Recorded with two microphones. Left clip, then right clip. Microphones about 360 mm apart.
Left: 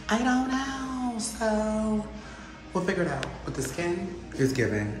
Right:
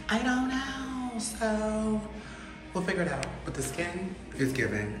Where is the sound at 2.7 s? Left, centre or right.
Centre.